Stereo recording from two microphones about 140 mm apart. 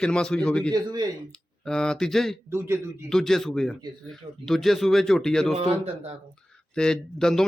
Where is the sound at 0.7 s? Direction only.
25° right (ahead or behind).